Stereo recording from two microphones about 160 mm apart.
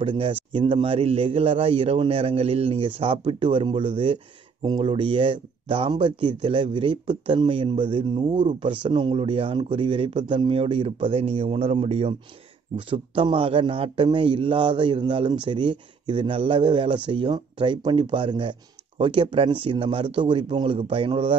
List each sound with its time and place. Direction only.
0.0 s a man's voice: 35° right (ahead or behind)